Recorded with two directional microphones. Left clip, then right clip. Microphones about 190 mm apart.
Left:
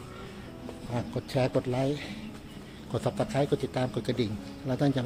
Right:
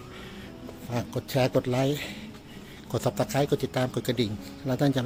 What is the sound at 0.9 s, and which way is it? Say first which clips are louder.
Speech: right 3 dB; 25° right (ahead or behind).